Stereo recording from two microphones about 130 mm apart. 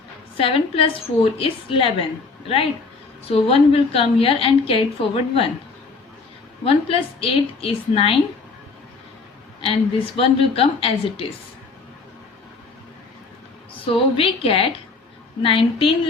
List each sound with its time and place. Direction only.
0.3 s a woman's voice: 45° left (ahead or behind)
3.2 s a woman's voice: 45° left (ahead or behind)
6.7 s a woman's voice: 45° left (ahead or behind)
10.2 s a woman's voice: 45° left (ahead or behind)
13.8 s a woman's voice: 45° left (ahead or behind)